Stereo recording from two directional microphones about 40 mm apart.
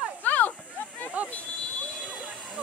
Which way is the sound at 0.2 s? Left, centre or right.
Left.